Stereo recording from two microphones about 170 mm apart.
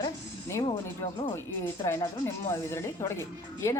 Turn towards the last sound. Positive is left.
turn(degrees=15)  # may be behind; listen again after turning